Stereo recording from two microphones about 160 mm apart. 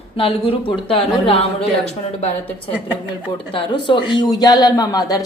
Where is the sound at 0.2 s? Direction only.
35° left (ahead or behind).